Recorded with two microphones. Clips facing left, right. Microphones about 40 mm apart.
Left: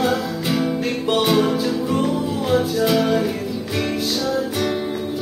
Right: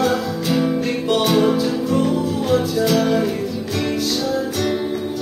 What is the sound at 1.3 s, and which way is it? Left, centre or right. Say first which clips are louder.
Music: right 3 dB; centre.